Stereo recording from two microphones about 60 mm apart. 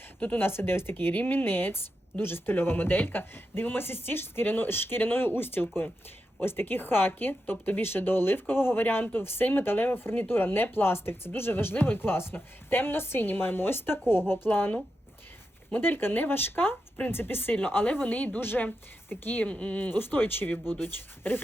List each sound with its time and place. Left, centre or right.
0.2 s speech: left
0.4 s speech: left
19.9 s speech: left